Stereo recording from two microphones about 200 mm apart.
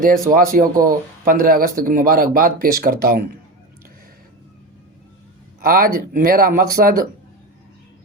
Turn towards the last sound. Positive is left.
turn(degrees=-45)  # may be behind; listen again after turning